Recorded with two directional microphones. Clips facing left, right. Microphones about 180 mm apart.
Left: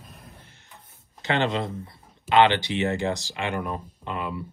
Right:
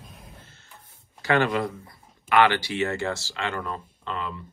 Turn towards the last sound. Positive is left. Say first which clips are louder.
# left 1 dB
turn(degrees=15)  # may be behind; listen again after turning